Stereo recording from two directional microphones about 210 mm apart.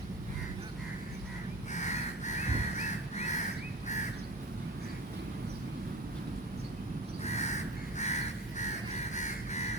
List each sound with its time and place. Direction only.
1.7 s crow: 35° left (ahead or behind)
7.3 s crow: 35° left (ahead or behind)